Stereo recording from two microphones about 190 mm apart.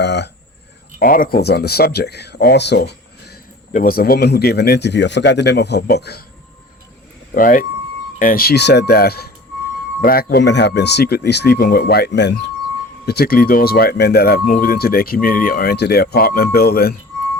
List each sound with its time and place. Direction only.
0.0 s speech: 65° left (ahead or behind)
0.9 s speech: 45° left (ahead or behind)
3.7 s speech: 45° left (ahead or behind)
7.3 s speech: 45° left (ahead or behind)